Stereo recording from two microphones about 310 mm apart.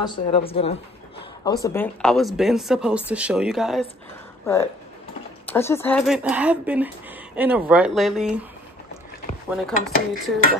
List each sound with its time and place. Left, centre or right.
0.0 s a woman's voice: centre
5.5 s a woman's voice: centre
9.6 s a woman's voice: centre